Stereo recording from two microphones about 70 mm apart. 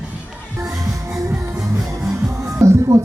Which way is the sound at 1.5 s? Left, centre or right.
Centre.